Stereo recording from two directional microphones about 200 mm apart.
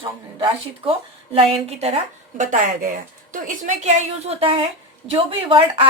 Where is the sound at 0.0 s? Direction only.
25° right (ahead or behind).